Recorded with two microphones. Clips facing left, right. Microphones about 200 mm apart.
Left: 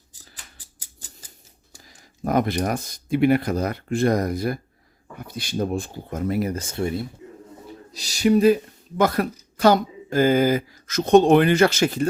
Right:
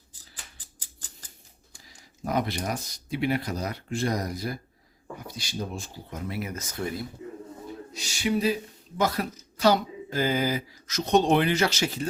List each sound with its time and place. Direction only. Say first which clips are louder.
1.7 s speech: left 4 dB; 50° left (ahead or behind)
6.5 s speech: left 7 dB; 30° left (ahead or behind)
7.9 s a sound: left 9 dB; 40° left (ahead or behind)
9.0 s speech: left 6 dB; 55° left (ahead or behind)